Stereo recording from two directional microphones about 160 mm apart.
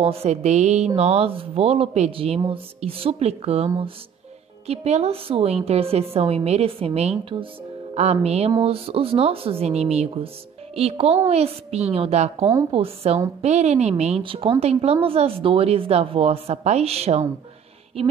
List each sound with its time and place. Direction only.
0.0 s a woman's voice: 40° right (ahead or behind)